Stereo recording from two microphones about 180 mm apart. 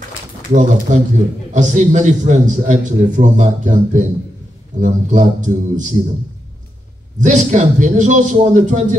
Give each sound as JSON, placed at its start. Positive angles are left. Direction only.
{"t": 0.5, "sound": "a man's voice", "side_deg": -40}
{"t": 7.2, "sound": "a man's voice", "side_deg": -40}